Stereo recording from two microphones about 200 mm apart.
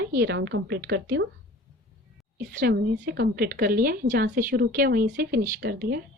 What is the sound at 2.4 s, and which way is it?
A woman's voice, 50° right (ahead or behind).